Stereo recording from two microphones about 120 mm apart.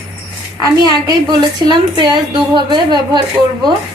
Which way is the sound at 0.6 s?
35° right (ahead or behind).